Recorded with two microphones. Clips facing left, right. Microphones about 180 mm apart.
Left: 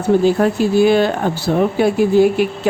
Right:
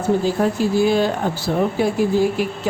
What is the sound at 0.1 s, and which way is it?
A woman's voice, 70° left (ahead or behind).